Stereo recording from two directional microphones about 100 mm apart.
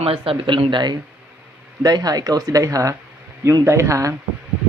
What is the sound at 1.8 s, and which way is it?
A woman's voice, 40° right (ahead or behind).